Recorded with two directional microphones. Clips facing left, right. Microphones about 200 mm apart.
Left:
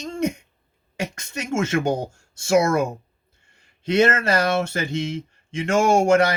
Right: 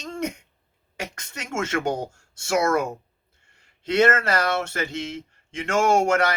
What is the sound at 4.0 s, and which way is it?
Speech, 15° left (ahead or behind).